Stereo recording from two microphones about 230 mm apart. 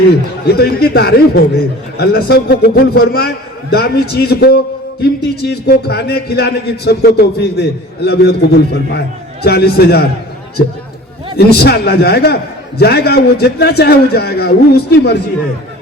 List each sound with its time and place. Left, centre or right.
0.1 s a man's voice: left
11.3 s a man's voice: left